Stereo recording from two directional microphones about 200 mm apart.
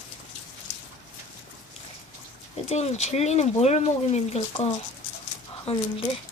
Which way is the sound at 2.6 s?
35° left (ahead or behind).